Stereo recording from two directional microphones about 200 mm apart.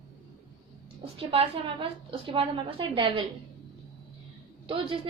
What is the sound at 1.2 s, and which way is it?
A woman's voice, 30° right (ahead or behind).